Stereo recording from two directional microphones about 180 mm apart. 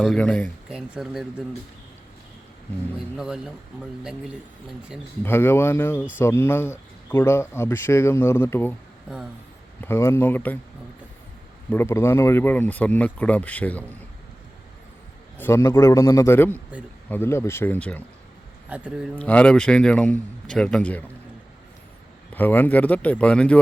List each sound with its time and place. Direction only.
0.0 s speech: 5° left (ahead or behind)
0.7 s a man's voice: 5° right (ahead or behind)
3.2 s a man's voice: 5° right (ahead or behind)
5.2 s speech: 10° left (ahead or behind)
9.8 s speech: 15° left (ahead or behind)
11.7 s speech: 15° left (ahead or behind)
15.4 s speech: 15° left (ahead or behind)
18.7 s a man's voice: 5° right (ahead or behind)
19.2 s a man's voice: 5° left (ahead or behind)
22.4 s speech: 10° left (ahead or behind)